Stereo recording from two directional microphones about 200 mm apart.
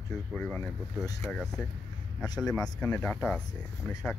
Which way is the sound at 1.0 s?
15° left (ahead or behind).